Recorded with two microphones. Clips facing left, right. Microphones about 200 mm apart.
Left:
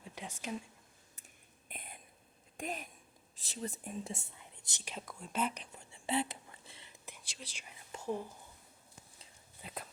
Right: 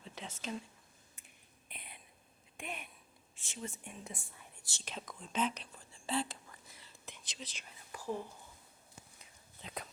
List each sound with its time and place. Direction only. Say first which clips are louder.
0.0 s whispering: even; 10° left (ahead or behind)
1.7 s whispering: left 4 dB; 45° left (ahead or behind)
2.6 s speech: left 5 dB; 40° left (ahead or behind); by 4.9 s 20° left (ahead or behind)
4.9 s speech: even; 10° left (ahead or behind)
5.7 s whispering: left 2 dB; 20° left (ahead or behind)
7.0 s speech: right 2 dB; 10° left (ahead or behind)
7.9 s speech: left 2 dB; 20° left (ahead or behind)
9.6 s a sound: right 1 dB; 5° left (ahead or behind)